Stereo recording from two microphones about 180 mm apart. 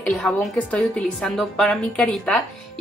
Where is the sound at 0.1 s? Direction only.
5° left (ahead or behind).